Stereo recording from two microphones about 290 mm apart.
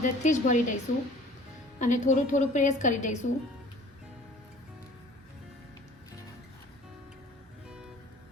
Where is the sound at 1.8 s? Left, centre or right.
Left.